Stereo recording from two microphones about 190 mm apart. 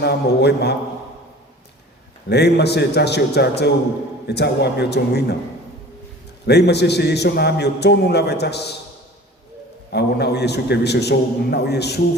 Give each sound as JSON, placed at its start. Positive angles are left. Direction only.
{"t": 0.0, "sound": "a man's voice", "side_deg": 60}
{"t": 2.3, "sound": "a man's voice", "side_deg": 60}
{"t": 6.4, "sound": "a man's voice", "side_deg": 60}
{"t": 9.9, "sound": "a man's voice", "side_deg": 60}